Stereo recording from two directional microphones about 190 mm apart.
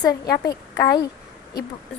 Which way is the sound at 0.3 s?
20° left (ahead or behind).